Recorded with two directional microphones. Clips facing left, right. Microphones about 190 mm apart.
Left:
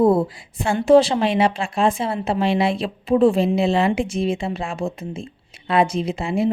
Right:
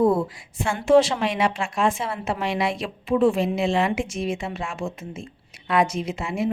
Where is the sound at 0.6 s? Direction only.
35° left (ahead or behind).